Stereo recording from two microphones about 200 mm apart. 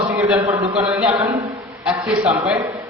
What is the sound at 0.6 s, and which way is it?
Speech, 30° right (ahead or behind).